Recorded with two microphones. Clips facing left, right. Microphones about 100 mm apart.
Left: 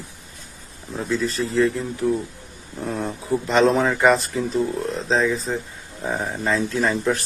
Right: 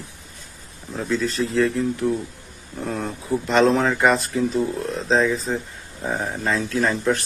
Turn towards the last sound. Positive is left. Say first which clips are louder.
# even
turn(degrees=0)  # may be behind; listen again after turning